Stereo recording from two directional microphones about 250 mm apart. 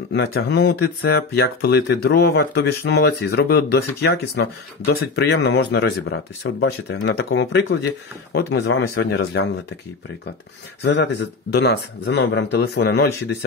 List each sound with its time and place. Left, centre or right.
0.1 s speech: left
10.8 s speech: left